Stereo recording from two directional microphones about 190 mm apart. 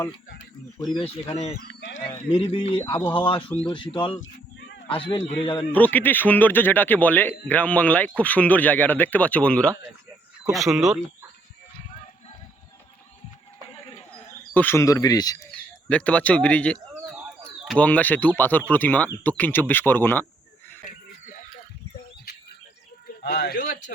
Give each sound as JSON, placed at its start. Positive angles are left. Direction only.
{"t": 0.8, "sound": "speech", "side_deg": 25}
{"t": 2.3, "sound": "speech", "side_deg": 30}
{"t": 4.2, "sound": "a sound", "side_deg": 65}
{"t": 4.9, "sound": "speech", "side_deg": 25}
{"t": 5.7, "sound": "speech", "side_deg": 10}
{"t": 13.7, "sound": "a sound", "side_deg": 30}
{"t": 14.1, "sound": "speech", "side_deg": 10}
{"t": 15.5, "sound": "speech", "side_deg": 5}
{"t": 23.2, "sound": "speech", "side_deg": 55}